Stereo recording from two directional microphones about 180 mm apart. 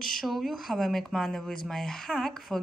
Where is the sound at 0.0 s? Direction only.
Centre (ahead or behind).